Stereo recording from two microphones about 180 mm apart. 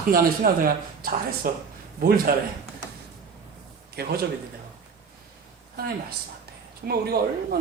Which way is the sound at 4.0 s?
60° right (ahead or behind).